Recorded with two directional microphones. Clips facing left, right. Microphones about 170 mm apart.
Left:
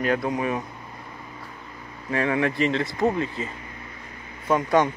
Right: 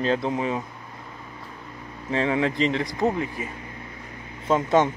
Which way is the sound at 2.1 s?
20° right (ahead or behind).